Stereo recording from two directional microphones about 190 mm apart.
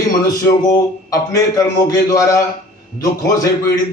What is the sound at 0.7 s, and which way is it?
A man's voice, 15° left (ahead or behind).